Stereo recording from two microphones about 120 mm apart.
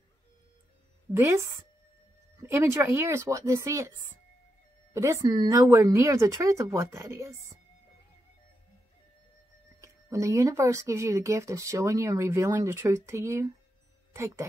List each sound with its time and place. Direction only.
1.1 s speech: 20° right (ahead or behind)
9.8 s speech: 25° right (ahead or behind)